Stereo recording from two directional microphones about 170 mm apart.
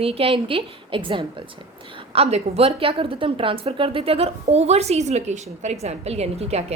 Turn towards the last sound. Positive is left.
turn(degrees=-40)  # may be behind; listen again after turning